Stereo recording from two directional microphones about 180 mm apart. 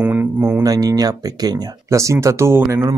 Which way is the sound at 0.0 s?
10° right (ahead or behind).